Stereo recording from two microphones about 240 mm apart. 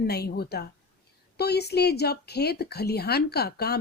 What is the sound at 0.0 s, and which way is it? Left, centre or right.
A woman's voice, left.